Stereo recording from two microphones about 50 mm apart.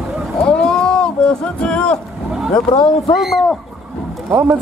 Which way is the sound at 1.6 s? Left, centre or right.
Left.